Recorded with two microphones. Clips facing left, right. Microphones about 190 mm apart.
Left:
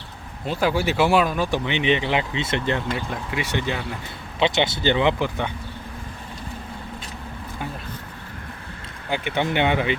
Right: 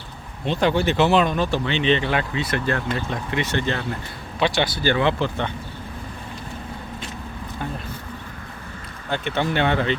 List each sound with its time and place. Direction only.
0.4 s speech: 5° left (ahead or behind); by 2.8 s 20° left (ahead or behind)
2.9 s speech: 10° left (ahead or behind)
9.0 s speech: 10° left (ahead or behind)